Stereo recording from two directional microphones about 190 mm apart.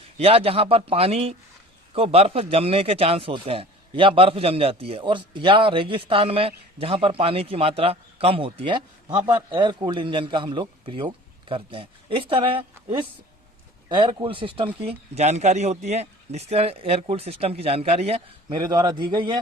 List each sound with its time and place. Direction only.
0.2 s a man's voice: 30° right (ahead or behind)